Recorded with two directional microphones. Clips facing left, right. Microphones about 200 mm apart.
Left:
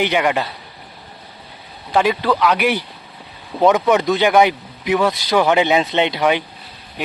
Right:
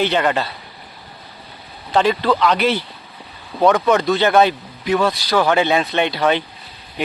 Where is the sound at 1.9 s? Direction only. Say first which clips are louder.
Even; 10° left (ahead or behind).